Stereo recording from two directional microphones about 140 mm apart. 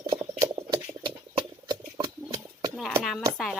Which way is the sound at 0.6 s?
35° right (ahead or behind).